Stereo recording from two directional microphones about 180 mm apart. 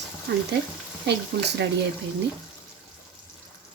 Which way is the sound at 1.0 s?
65° right (ahead or behind).